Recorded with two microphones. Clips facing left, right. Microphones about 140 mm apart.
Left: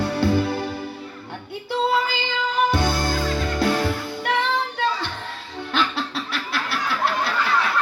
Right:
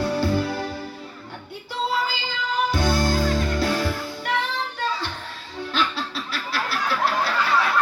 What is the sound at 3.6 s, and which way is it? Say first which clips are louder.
Music: left 6 dB; 55° left (ahead or behind).